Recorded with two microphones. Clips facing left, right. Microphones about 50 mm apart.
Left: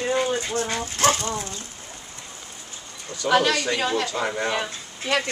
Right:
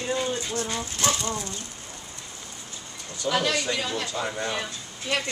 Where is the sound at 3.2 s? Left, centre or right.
Left.